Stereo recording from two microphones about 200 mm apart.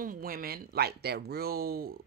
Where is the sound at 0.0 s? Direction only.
45° right (ahead or behind).